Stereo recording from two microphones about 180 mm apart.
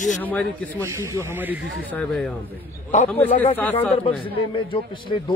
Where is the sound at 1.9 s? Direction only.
5° left (ahead or behind).